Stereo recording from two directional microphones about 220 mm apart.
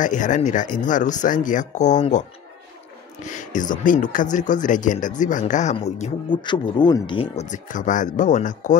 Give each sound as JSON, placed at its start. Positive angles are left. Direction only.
{"t": 0.0, "sound": "speech", "side_deg": 35}
{"t": 3.3, "sound": "speech", "side_deg": 35}